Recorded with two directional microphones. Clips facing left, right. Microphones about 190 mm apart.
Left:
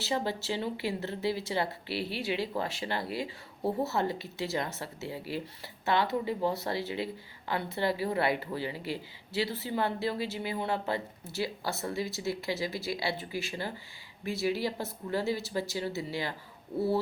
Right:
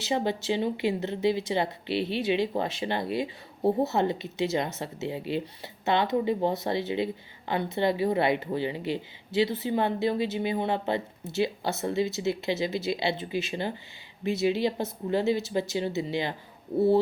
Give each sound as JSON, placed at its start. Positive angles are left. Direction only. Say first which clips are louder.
{"t": 0.0, "sound": "a woman's voice", "louder": "right 4 dB", "side_deg": -20}